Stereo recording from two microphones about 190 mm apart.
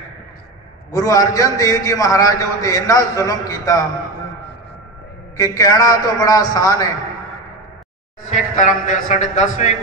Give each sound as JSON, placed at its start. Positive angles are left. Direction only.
{"t": 0.9, "sound": "a man's voice", "side_deg": 15}
{"t": 5.4, "sound": "a man's voice", "side_deg": 15}
{"t": 8.3, "sound": "a man's voice", "side_deg": 40}